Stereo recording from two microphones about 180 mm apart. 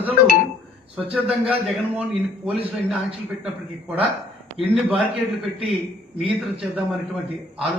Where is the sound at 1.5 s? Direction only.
10° right (ahead or behind).